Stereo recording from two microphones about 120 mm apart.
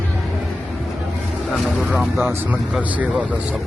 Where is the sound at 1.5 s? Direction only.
10° right (ahead or behind).